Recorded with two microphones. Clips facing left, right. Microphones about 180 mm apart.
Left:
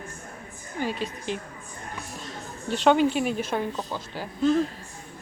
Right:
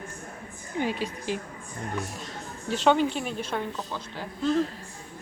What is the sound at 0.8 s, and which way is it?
Speech, 15° right (ahead or behind).